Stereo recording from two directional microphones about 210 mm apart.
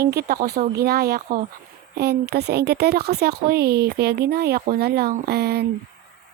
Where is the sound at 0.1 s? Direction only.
50° right (ahead or behind).